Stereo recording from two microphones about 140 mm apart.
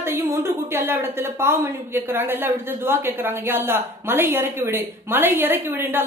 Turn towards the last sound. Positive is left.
turn(degrees=-15)  # may be behind; listen again after turning